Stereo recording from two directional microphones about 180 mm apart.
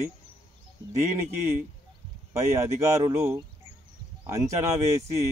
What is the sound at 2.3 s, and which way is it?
Speech, 15° right (ahead or behind).